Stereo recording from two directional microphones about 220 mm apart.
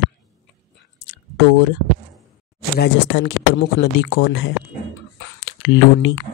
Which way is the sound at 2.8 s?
55° left (ahead or behind).